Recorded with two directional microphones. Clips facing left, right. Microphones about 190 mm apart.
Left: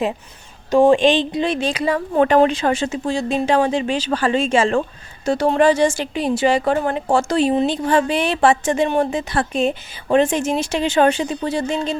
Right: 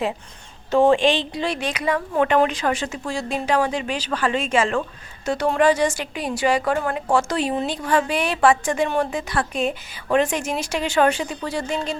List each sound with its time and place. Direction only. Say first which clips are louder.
0.7 s speech: left 3 dB; 15° left (ahead or behind)